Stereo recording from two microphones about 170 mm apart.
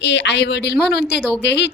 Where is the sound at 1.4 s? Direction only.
90° left.